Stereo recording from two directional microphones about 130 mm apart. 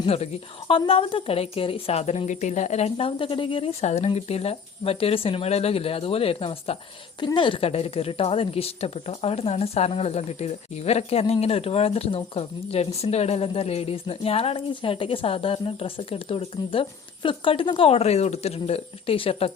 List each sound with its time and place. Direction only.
0.0 s a woman's voice: 50° left (ahead or behind)